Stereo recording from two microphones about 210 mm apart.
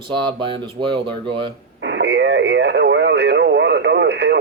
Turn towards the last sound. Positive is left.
turn(degrees=-55)  # may be behind; listen again after turning